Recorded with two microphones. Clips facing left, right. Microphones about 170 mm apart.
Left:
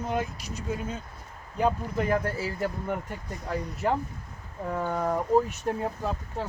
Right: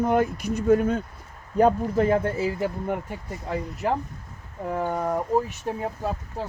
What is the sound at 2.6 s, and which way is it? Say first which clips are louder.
Speech: right 3 dB; 5° right (ahead or behind).